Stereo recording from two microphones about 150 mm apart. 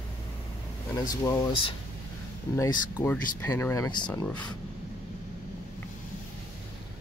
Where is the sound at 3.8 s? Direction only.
30° left (ahead or behind).